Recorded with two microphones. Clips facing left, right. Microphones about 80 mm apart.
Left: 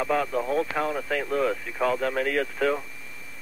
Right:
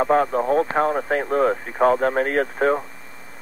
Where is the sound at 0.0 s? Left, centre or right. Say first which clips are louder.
Right 7 dB; right.